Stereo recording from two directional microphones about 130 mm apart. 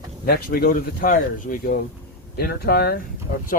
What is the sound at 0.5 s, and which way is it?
Speech, 90° left.